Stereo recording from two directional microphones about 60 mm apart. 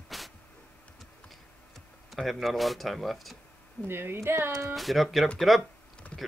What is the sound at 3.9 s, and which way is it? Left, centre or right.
Speech, right.